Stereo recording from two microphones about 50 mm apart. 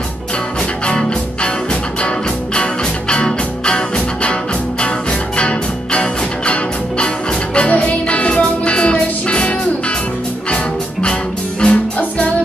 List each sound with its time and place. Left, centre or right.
0.8 s music: centre